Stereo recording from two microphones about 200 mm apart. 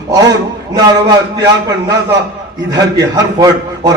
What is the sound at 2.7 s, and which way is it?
A man's voice, 20° right (ahead or behind).